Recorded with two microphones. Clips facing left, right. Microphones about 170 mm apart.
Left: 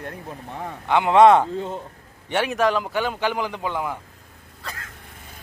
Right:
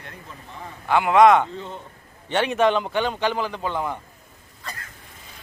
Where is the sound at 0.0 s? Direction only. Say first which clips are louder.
Left 7 dB; 55° left (ahead or behind).